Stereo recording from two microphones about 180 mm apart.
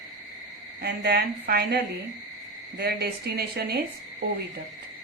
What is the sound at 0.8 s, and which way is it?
Speech, 60° right (ahead or behind).